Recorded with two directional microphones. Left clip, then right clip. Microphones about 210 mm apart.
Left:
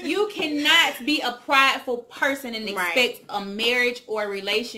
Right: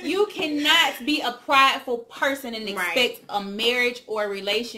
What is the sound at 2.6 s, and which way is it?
Speech, 20° left (ahead or behind).